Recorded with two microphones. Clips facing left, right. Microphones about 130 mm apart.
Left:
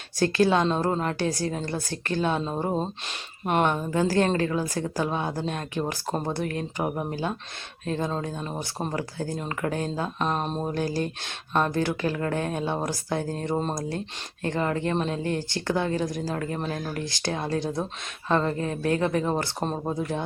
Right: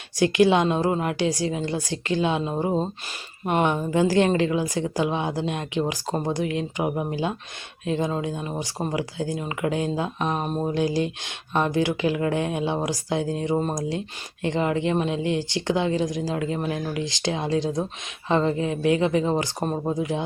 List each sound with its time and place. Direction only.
0.2 s speech: 15° right (ahead or behind)